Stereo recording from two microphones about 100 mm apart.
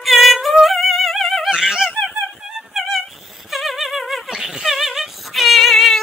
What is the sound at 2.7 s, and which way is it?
Insect, centre (ahead or behind).